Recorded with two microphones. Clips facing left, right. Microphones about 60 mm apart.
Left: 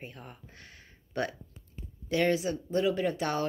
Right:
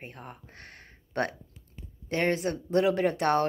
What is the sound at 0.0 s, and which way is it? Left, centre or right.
Speech, right.